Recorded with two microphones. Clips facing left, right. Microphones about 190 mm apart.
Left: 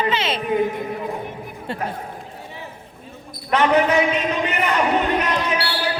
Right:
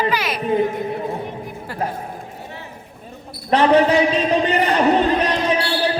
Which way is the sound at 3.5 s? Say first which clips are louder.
Right 3 dB; 30° right (ahead or behind).